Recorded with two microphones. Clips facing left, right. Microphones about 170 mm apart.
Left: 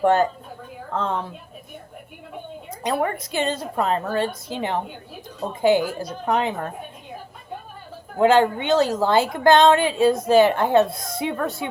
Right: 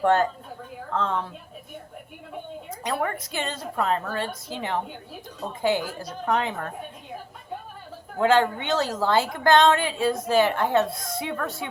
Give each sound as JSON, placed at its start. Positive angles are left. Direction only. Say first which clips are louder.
{"t": 0.0, "sound": "a woman's voice", "louder": "left 3 dB", "side_deg": 10}
{"t": 2.6, "sound": "a woman's voice", "louder": "left 4 dB", "side_deg": 20}
{"t": 8.2, "sound": "a woman's voice", "louder": "left 4 dB", "side_deg": 20}